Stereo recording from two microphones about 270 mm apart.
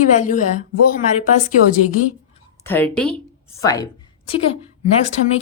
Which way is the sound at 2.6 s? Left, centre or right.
Centre.